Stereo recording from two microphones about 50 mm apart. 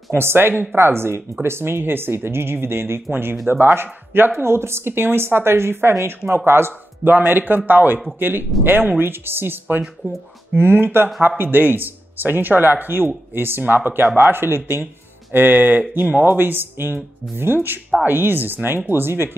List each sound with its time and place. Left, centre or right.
0.1 s speech: right
7.1 s speech: right
16.3 s speech: right